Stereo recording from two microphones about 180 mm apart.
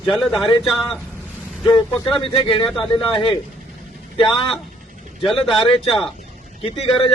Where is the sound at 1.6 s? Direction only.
25° left (ahead or behind).